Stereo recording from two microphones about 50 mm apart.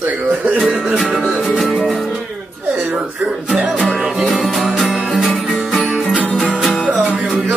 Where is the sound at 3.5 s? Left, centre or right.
Centre.